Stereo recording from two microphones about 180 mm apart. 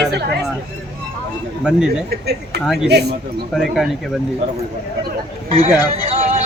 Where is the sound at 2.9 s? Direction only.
65° right (ahead or behind).